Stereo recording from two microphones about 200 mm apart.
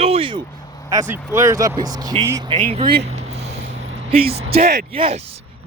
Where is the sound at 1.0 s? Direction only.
10° right (ahead or behind).